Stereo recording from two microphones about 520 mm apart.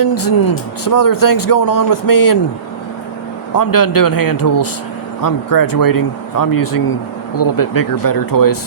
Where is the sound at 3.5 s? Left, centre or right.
Left.